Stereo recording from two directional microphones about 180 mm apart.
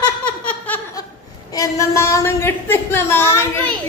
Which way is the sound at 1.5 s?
20° left (ahead or behind).